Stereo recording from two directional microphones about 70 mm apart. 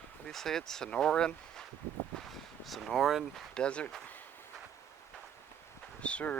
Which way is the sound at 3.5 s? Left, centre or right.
Centre.